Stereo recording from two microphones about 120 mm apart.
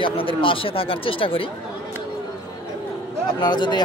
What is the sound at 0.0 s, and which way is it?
Speech, 45° left (ahead or behind).